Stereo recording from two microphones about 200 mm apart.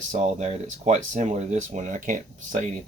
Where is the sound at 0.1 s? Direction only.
35° right (ahead or behind).